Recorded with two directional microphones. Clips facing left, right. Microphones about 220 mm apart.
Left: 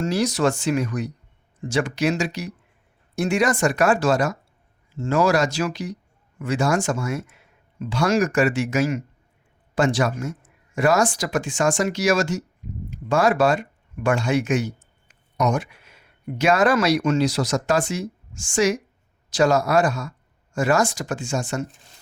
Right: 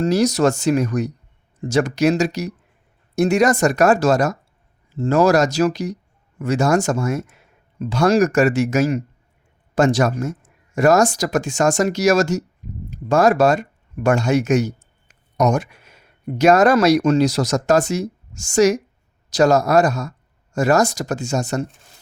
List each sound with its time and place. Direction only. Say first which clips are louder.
0.0 s speech: right 5 dB; 40° right (ahead or behind)